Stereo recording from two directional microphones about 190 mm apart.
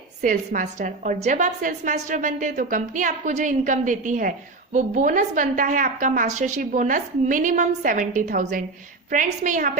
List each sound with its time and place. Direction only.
0.2 s a woman's voice: 45° right (ahead or behind)